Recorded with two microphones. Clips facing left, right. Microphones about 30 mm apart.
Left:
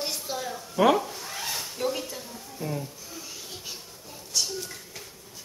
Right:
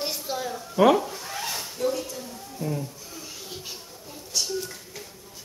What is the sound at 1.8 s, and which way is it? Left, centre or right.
Dishes, centre.